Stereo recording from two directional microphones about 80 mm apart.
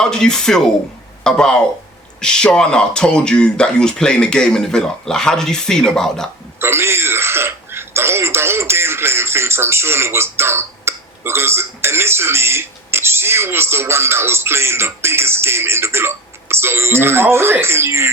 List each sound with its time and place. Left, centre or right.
0.0 s speech: centre
6.6 s speech: right